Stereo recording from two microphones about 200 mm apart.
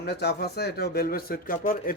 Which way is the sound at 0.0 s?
55° left (ahead or behind).